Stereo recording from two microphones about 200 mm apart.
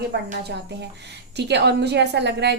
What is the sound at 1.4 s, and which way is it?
A woman's voice, 55° right (ahead or behind).